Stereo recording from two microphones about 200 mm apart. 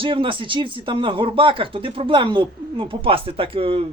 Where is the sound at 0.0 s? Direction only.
25° right (ahead or behind).